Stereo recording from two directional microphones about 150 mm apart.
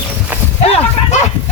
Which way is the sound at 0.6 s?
40° left (ahead or behind).